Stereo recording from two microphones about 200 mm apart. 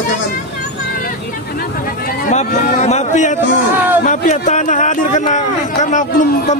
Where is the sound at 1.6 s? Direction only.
45° left (ahead or behind).